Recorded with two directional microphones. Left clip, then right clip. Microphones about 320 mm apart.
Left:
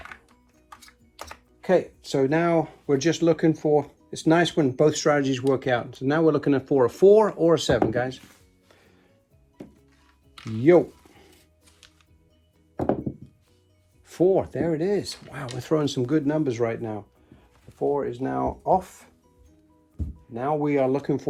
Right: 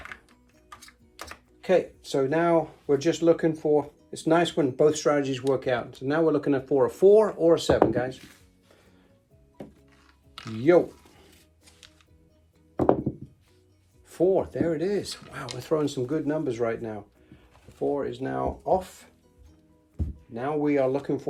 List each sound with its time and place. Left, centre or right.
0.0 s speech: centre; by 8.2 s left
14.1 s speech: left
20.3 s speech: centre